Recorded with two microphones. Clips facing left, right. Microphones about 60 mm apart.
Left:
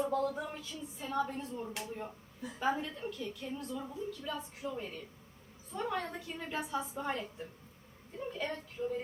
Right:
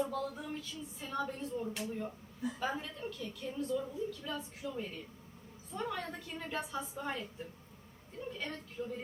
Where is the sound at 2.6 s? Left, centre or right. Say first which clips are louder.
Left 7 dB; centre.